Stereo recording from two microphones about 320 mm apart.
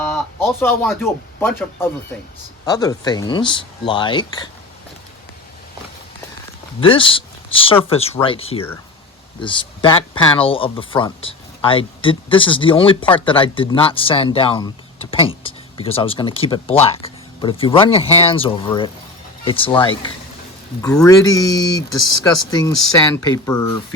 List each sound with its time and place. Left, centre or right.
0.1 s speech: centre
6.7 s speech: centre